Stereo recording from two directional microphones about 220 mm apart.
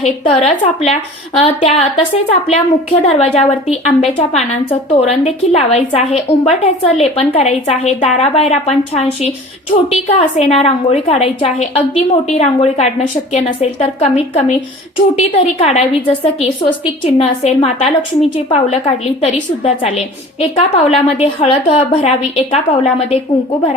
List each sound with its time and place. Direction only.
0.0 s a woman's voice: 25° left (ahead or behind)
3.1 s a woman's voice: 30° left (ahead or behind)